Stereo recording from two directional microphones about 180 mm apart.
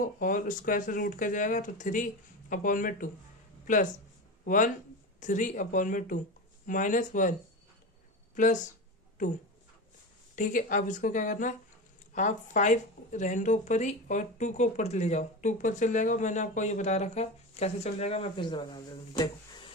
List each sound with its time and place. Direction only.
0.0 s speech: 50° left (ahead or behind)
4.4 s speech: 45° left (ahead or behind)
10.3 s speech: 45° left (ahead or behind); by 19.7 s 25° left (ahead or behind)